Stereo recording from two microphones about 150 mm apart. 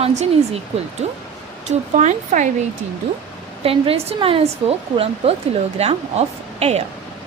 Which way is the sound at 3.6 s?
40° right (ahead or behind).